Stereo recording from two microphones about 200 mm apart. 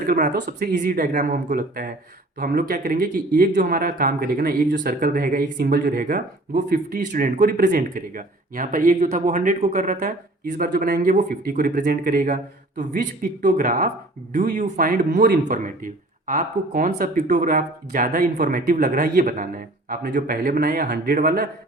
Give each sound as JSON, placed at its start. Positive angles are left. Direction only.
{"t": 0.0, "sound": "speech", "side_deg": -40}